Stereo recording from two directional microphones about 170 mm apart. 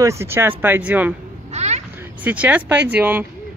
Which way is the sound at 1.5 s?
40° right (ahead or behind).